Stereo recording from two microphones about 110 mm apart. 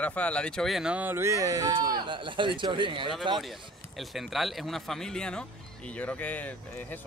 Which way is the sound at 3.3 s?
Centre (ahead or behind).